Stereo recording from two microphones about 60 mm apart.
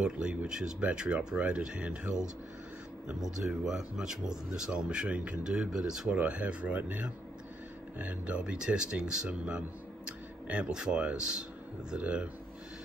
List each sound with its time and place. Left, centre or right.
0.0 s speech: centre
6.1 s speech: right